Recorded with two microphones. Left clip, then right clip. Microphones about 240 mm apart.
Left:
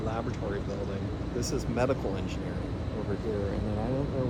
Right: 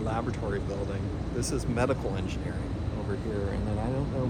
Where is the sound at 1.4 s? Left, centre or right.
Right.